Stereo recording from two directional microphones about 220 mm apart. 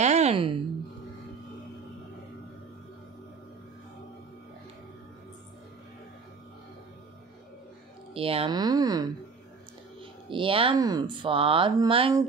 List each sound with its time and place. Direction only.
0.0 s a sound: 30° right (ahead or behind)
8.1 s speech: 25° right (ahead or behind)
10.3 s speech: 25° right (ahead or behind)